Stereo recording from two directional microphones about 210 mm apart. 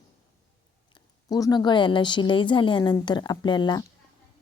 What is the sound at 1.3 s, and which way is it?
A woman's voice, 15° left (ahead or behind).